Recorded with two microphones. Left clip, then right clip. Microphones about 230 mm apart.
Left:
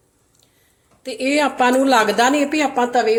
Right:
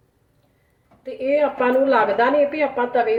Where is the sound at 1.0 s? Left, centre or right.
Left.